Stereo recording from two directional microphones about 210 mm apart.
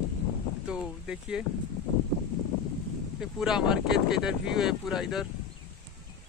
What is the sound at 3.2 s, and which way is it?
Speech, centre (ahead or behind).